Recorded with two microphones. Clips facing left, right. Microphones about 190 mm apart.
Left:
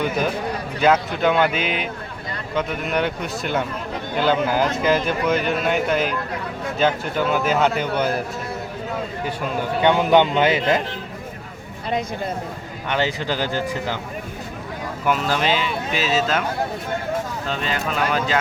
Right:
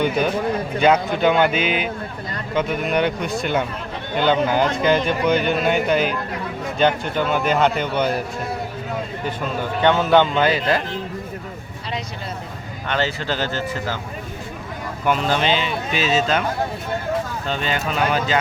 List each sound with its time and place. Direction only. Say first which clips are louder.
0.8 s speech: right 1 dB; centre (ahead or behind)
9.8 s speech: even; 15° left (ahead or behind)
12.9 s speech: even; 15° left (ahead or behind)
15.0 s speech: right 1 dB; 5° left (ahead or behind)
17.5 s speech: right 2 dB; centre (ahead or behind)